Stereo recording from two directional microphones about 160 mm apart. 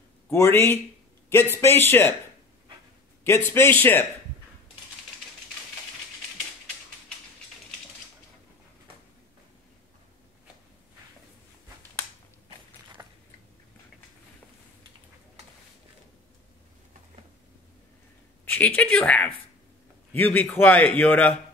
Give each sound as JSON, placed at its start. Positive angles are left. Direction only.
{"t": 0.3, "sound": "a man's voice", "side_deg": 15}
{"t": 3.3, "sound": "a man's voice", "side_deg": 15}
{"t": 13.0, "sound": "biting", "side_deg": -20}
{"t": 18.4, "sound": "a man's voice", "side_deg": 10}